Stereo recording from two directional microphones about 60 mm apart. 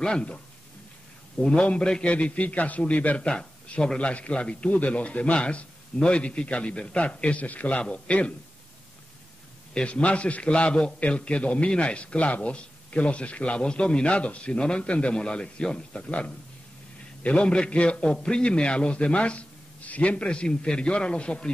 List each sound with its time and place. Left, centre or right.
0.0 s a man's voice: centre
1.4 s a man's voice: centre
9.8 s a man's voice: centre